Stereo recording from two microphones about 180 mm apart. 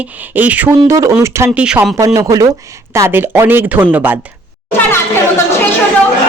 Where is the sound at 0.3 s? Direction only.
10° right (ahead or behind).